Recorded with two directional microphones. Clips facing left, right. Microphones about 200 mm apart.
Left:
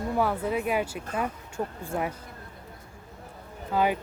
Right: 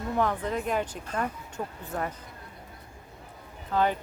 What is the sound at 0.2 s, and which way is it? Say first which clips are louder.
Speech: left 1 dB; 10° left (ahead or behind).